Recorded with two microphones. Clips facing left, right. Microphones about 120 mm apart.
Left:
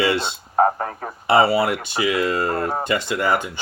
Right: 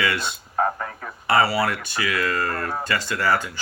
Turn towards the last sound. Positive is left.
turn(degrees=20)  # may be behind; listen again after turning